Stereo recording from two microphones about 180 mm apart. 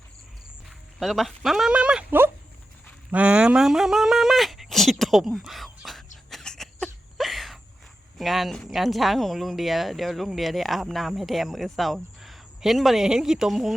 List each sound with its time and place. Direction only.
0.9 s speech: centre (ahead or behind)
6.3 s a sound: 5° left (ahead or behind)
8.2 s speech: centre (ahead or behind)